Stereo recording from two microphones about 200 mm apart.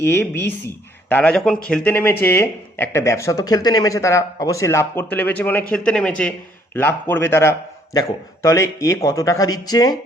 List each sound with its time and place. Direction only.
0.2 s speech: 10° left (ahead or behind)